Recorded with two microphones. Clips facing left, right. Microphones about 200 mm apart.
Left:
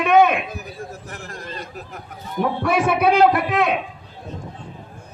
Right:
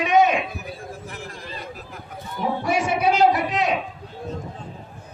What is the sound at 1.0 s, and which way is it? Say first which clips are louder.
Chatter: left 1 dB; 45° left (ahead or behind).